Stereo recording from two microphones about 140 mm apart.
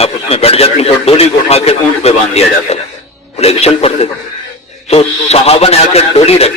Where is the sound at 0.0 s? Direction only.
45° left (ahead or behind).